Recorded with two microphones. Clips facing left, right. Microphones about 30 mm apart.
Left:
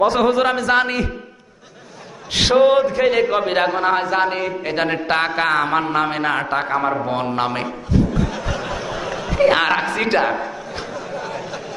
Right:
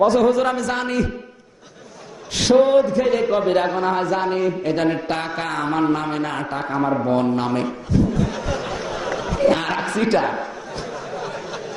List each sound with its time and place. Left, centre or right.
0.1 s a man's voice: left
2.3 s a man's voice: left
9.6 s a woman's voice: left